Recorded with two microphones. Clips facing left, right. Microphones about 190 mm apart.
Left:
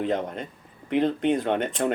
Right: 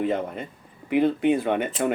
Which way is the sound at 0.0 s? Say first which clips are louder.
Right 1 dB; 5° right (ahead or behind).